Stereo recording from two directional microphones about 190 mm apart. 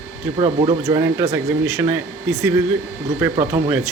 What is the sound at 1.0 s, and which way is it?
Speech, 15° right (ahead or behind).